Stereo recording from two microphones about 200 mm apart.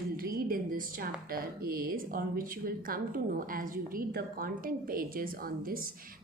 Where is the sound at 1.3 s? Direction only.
45° right (ahead or behind).